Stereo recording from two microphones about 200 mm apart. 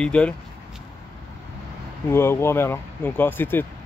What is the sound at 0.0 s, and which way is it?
Speech, 5° left (ahead or behind).